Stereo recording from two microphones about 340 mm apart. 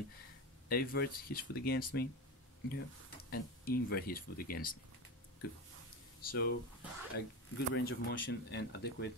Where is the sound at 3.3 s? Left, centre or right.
Left.